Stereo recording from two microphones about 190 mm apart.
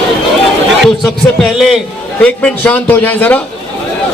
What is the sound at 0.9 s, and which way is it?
A man's voice, 5° left (ahead or behind).